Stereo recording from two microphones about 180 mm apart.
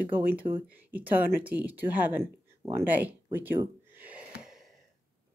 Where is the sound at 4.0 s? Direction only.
10° right (ahead or behind).